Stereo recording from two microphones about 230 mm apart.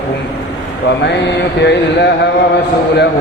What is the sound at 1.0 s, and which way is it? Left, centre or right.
Speech, left.